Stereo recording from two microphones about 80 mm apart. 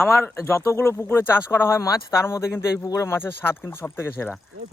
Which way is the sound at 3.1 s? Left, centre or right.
Left.